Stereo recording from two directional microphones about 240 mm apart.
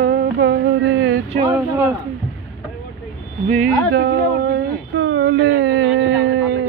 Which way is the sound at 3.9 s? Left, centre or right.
Right.